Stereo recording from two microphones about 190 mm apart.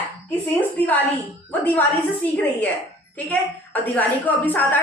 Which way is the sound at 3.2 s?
10° left (ahead or behind).